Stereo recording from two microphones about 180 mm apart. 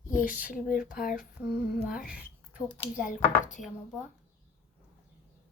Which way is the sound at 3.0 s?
45° left (ahead or behind).